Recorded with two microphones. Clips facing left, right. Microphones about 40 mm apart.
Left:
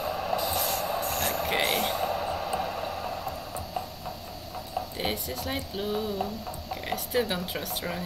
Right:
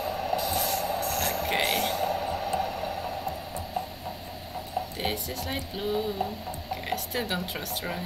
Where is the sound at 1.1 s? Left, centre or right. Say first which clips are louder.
Even; left.